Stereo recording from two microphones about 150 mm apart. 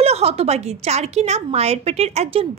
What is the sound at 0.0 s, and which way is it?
A woman's voice, 45° right (ahead or behind).